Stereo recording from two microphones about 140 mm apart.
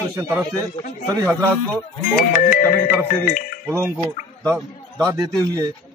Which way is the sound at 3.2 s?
80° left.